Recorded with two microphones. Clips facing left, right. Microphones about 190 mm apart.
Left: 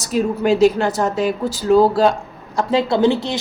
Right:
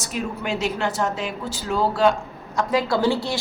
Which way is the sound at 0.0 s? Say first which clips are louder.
Left 10 dB; 35° left (ahead or behind).